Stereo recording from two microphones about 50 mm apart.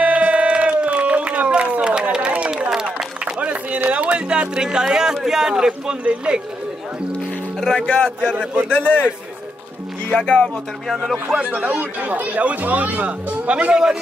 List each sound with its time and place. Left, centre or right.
0.0 s crowd: right
2.7 s applause: centre
3.3 s music: right
6.0 s speech: right
7.8 s a man's voice: left
10.0 s speech: left
11.4 s a man's voice: right